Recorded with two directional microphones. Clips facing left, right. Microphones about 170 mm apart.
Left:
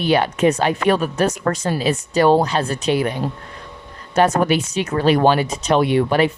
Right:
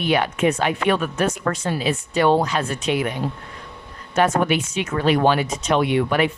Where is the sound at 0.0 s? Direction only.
35° left (ahead or behind).